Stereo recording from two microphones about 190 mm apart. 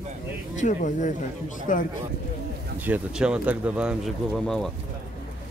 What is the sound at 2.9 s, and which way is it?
Speech, 5° right (ahead or behind).